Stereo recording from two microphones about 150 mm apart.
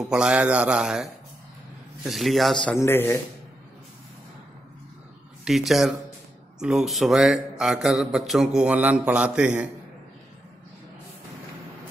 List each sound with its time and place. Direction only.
0.1 s speech: 5° right (ahead or behind)
2.8 s speech: 15° left (ahead or behind)
5.4 s speech: centre (ahead or behind)